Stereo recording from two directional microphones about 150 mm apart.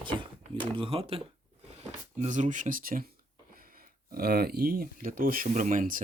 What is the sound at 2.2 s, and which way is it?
Speech, 55° right (ahead or behind).